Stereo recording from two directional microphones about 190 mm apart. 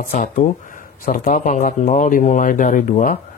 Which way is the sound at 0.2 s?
45° left (ahead or behind).